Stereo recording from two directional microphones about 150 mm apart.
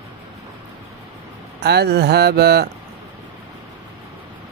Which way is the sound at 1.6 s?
90° right.